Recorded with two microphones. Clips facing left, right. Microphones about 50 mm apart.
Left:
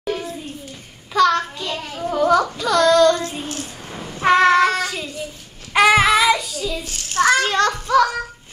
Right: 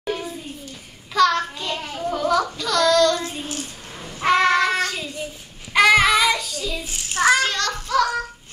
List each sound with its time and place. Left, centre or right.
0.0 s a sound: centre
1.1 s child singing: centre
2.0 s a sound: centre
4.1 s child singing: centre
6.8 s a child's voice: centre
7.4 s a child's voice: left
7.7 s a child's voice: centre